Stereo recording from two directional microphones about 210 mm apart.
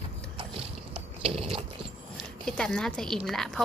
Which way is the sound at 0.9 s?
25° right (ahead or behind).